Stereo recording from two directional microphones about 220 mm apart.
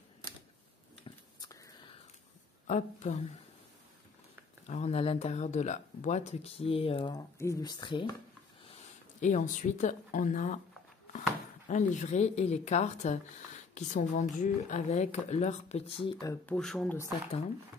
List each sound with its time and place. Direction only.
1.0 s whispering: 15° left (ahead or behind)
2.6 s a woman's voice: 30° left (ahead or behind)
4.6 s speech: 30° left (ahead or behind)
9.2 s a woman's voice: 35° left (ahead or behind)
11.7 s a woman's voice: 35° left (ahead or behind); by 16.5 s 15° left (ahead or behind)
16.5 s speech: centre (ahead or behind)